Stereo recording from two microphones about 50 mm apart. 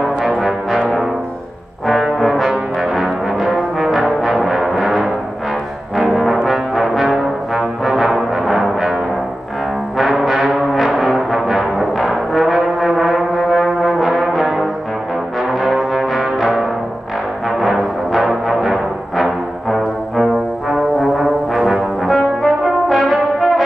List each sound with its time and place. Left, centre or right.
0.0 s brass instrument: centre
2.1 s brass instrument: centre
4.2 s music: centre
5.9 s brass instrument: centre
9.9 s brass instrument: centre
17.5 s music: centre
22.0 s brass instrument: centre